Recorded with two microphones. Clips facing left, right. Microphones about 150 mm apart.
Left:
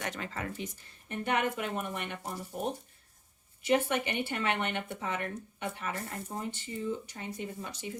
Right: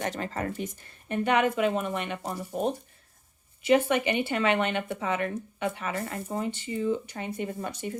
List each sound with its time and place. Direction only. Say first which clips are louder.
0.0 s speech: right 6 dB; 35° right (ahead or behind)
1.0 s speech: right 6 dB; 90° right; by 7.9 s 55° right (ahead or behind)